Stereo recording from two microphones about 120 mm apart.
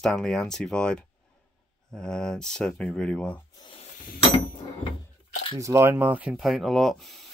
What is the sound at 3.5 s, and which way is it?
Snake, 45° left (ahead or behind).